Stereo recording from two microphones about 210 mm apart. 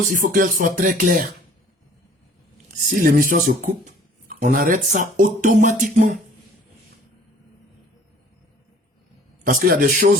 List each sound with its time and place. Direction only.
0.1 s speech: 40° right (ahead or behind)
2.9 s speech: 40° right (ahead or behind)
9.5 s a man's voice: 45° right (ahead or behind)